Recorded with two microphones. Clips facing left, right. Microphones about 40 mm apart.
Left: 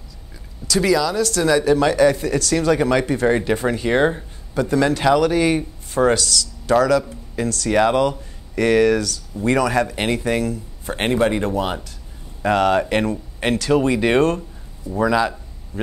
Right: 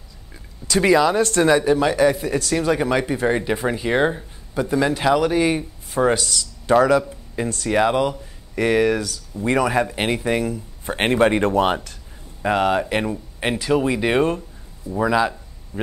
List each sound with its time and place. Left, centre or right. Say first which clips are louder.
0.7 s speech: right 2 dB; right; by 4.3 s centre
4.6 s speech: left 2 dB; centre; by 11.9 s right
12.4 s speech: left 2 dB; centre